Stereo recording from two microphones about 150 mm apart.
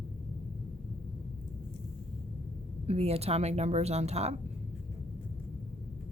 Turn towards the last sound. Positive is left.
turn(degrees=-45)  # may be behind; listen again after turning